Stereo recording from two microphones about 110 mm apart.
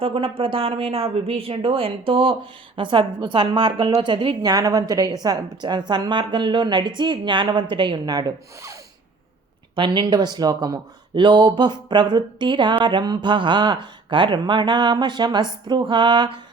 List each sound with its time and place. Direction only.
0.0 s a woman's voice: 55° right (ahead or behind); by 8.8 s 35° right (ahead or behind)
9.7 s a woman's voice: 45° right (ahead or behind)
11.1 s speech: 45° right (ahead or behind)